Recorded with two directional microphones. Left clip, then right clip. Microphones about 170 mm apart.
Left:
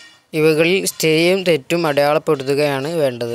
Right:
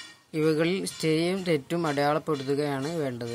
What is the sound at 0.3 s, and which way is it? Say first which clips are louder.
Speech: left 11 dB; 35° left (ahead or behind).